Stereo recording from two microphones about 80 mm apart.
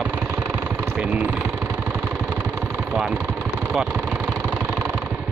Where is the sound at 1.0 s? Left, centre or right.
Centre.